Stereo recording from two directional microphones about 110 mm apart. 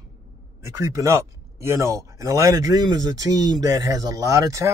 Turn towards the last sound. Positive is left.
turn(degrees=-30)  # may be behind; listen again after turning